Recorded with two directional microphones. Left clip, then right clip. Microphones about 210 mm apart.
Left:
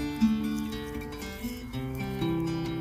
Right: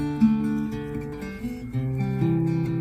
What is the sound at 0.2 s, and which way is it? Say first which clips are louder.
Music: right 6 dB; 40° right (ahead or behind).